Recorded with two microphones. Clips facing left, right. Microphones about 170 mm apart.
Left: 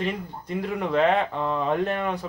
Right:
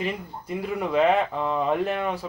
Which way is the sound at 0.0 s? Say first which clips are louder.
Left 1 dB; 5° right (ahead or behind).